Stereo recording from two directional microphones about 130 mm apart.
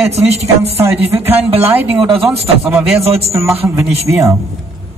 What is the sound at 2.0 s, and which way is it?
Speech, 45° right (ahead or behind).